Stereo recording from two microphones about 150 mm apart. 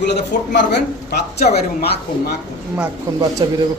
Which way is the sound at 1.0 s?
90° left.